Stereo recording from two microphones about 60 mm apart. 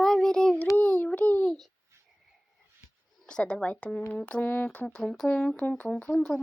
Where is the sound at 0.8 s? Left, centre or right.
Left.